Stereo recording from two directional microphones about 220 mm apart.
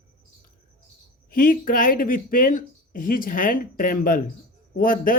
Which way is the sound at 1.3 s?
40° left (ahead or behind).